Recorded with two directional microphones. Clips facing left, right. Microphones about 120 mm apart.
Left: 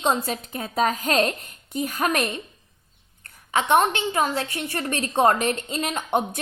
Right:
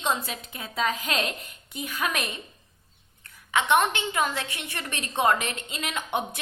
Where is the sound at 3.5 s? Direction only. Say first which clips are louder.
Left 3 dB; 35° left (ahead or behind).